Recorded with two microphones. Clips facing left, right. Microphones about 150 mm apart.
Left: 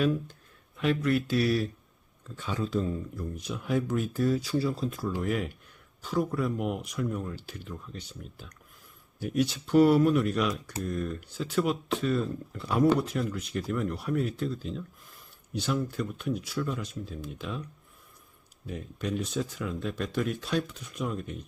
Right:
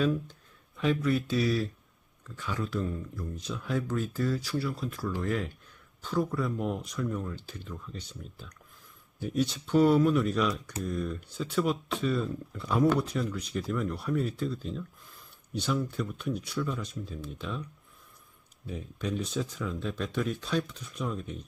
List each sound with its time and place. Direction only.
0.0 s speech: 5° left (ahead or behind)
2.2 s speech: 25° left (ahead or behind); by 7.8 s 10° left (ahead or behind)
9.2 s speech: 5° left (ahead or behind)
18.6 s speech: 5° left (ahead or behind)